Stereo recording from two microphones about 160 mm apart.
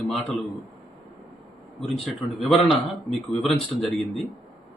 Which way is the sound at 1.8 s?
Centre (ahead or behind).